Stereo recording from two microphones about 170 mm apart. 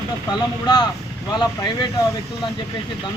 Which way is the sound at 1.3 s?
25° left (ahead or behind).